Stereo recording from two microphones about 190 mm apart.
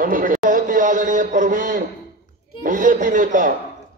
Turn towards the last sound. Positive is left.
turn(degrees=-45)  # may be behind; listen again after turning